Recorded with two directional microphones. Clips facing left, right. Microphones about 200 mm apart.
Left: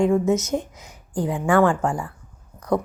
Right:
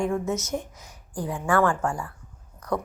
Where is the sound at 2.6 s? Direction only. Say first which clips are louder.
Left 6 dB; 20° left (ahead or behind).